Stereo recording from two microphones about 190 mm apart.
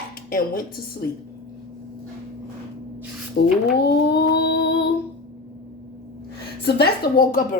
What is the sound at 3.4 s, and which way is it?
Speech, 60° left (ahead or behind).